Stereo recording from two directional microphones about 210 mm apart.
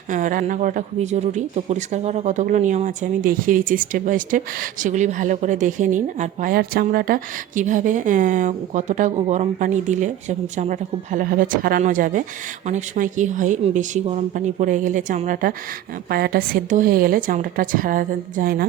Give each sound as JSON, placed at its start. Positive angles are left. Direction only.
{"t": 0.1, "sound": "a woman's voice", "side_deg": -35}